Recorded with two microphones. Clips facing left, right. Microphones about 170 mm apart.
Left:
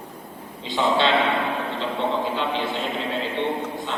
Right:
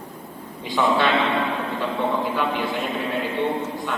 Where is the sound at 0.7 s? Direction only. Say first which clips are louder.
Right 1 dB; 25° left (ahead or behind).